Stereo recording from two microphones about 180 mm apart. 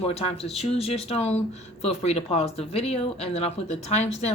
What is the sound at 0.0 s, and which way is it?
Speech, 35° left (ahead or behind).